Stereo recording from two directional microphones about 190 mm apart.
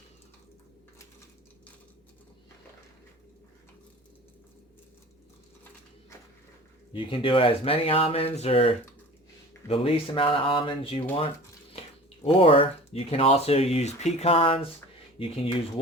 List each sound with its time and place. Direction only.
6.9 s speech: 25° left (ahead or behind)
12.2 s speech: 30° left (ahead or behind)